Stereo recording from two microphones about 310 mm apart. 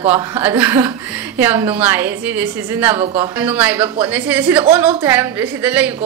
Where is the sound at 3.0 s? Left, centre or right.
Centre.